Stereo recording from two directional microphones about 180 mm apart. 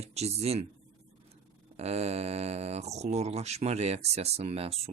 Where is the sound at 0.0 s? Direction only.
35° right (ahead or behind).